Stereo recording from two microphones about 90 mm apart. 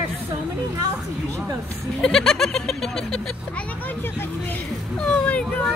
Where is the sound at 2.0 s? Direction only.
5° left (ahead or behind).